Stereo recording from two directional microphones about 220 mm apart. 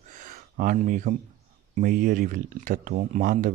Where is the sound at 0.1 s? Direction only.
35° right (ahead or behind).